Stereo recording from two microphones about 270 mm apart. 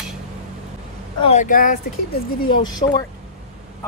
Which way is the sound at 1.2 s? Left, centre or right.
Left.